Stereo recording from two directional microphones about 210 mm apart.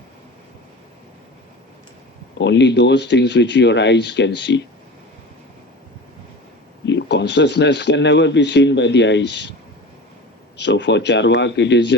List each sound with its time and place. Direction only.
2.4 s speech: 55° left (ahead or behind)
6.8 s speech: 55° left (ahead or behind)
10.6 s speech: 55° left (ahead or behind)